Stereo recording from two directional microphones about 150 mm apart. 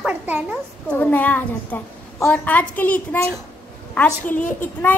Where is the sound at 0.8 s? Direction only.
10° left (ahead or behind).